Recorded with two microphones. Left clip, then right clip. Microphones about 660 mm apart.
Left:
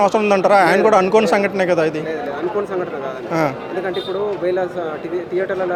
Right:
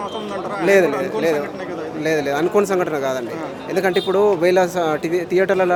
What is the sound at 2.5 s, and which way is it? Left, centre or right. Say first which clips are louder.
Speech: right 4 dB; right.